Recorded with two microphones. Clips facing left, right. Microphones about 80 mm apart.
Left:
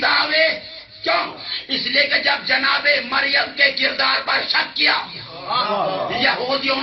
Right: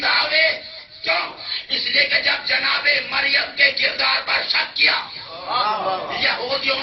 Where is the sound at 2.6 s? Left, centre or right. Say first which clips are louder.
Left 3 dB; left.